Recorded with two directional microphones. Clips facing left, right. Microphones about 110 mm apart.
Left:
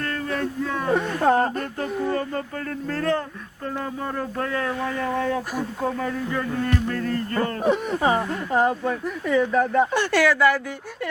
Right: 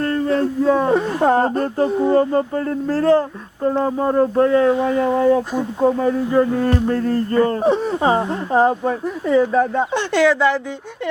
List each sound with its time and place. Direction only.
0.0 s speech: 30° right (ahead or behind)